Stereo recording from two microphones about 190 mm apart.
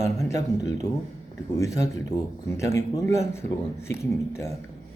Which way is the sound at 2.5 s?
15° left (ahead or behind).